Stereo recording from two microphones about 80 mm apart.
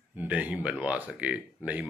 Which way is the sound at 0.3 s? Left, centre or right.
Centre.